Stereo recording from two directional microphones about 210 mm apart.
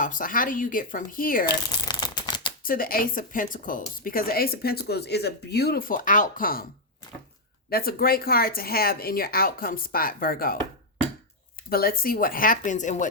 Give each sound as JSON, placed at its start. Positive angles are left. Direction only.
{"t": 0.0, "sound": "speech", "side_deg": 40}
{"t": 1.9, "sound": "a sound", "side_deg": 20}
{"t": 2.6, "sound": "a woman's voice", "side_deg": 40}
{"t": 7.7, "sound": "a woman's voice", "side_deg": 45}
{"t": 11.7, "sound": "speech", "side_deg": 45}